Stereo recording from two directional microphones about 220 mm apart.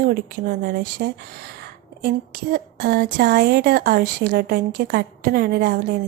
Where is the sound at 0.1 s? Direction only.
45° right (ahead or behind).